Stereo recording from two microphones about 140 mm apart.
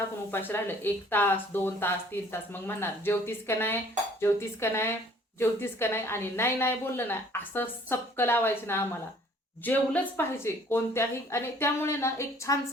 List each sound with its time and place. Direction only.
0.3 s a woman's voice: 15° left (ahead or behind)